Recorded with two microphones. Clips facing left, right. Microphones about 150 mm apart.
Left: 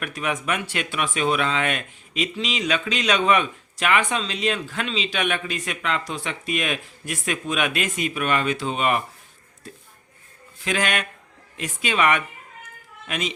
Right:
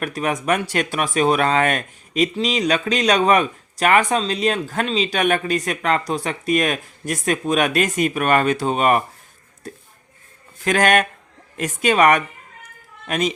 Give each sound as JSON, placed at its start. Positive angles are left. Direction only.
{"t": 0.0, "sound": "speech", "side_deg": -40}
{"t": 10.6, "sound": "speech", "side_deg": -45}